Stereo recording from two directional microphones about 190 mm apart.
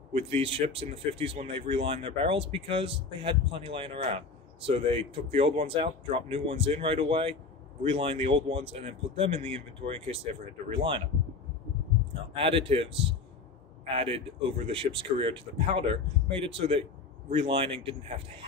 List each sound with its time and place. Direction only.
0.1 s speech: 30° right (ahead or behind)
12.4 s speech: 30° right (ahead or behind)